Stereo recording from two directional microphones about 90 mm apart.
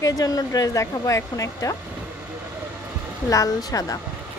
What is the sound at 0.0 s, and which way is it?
Speech, 40° left (ahead or behind).